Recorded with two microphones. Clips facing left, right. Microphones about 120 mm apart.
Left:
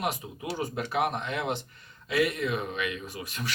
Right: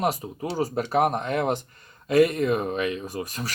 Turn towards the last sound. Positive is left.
turn(degrees=-40)  # may be behind; listen again after turning